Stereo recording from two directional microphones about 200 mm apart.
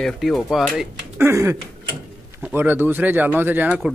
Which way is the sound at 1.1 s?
10° right (ahead or behind).